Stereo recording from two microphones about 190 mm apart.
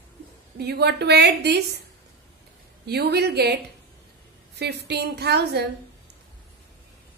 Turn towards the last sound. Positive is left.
turn(degrees=-60)  # may be behind; listen again after turning